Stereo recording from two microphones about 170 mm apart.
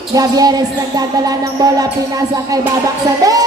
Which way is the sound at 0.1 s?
20° right (ahead or behind).